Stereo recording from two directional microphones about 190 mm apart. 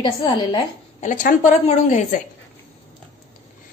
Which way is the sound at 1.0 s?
40° left (ahead or behind).